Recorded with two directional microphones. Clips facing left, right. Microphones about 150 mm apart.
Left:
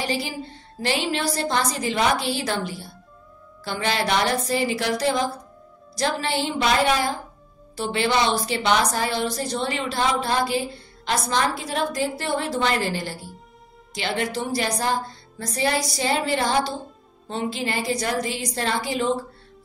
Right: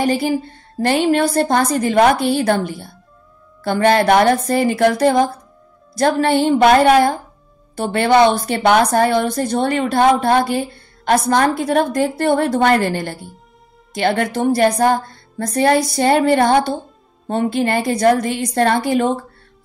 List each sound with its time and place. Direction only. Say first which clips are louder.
0.0 s a woman's voice: right 10 dB; 50° right (ahead or behind)